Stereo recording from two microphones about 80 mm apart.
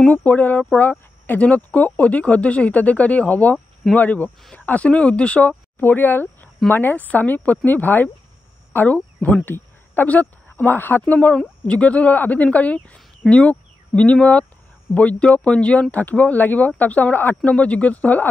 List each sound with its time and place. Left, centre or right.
0.1 s speech: left